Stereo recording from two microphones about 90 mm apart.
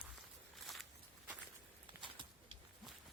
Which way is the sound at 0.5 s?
Centre (ahead or behind).